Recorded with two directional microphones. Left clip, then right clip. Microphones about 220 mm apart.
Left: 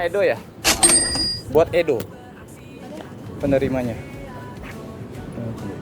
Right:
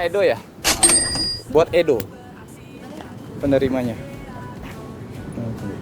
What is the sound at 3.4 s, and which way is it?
Speech, 5° right (ahead or behind).